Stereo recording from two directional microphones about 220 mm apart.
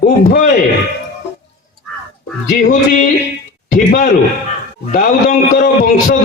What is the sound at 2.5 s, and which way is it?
A man's voice, 35° left (ahead or behind).